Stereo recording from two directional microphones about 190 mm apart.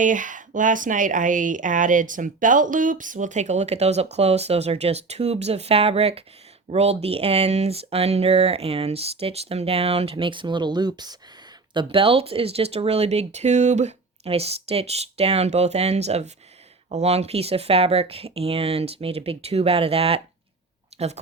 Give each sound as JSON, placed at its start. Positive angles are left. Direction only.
{"t": 0.0, "sound": "speech", "side_deg": -45}
{"t": 20.9, "sound": "chewing", "side_deg": -35}